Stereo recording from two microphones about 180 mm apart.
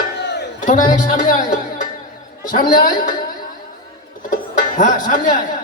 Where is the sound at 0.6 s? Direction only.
45° left (ahead or behind).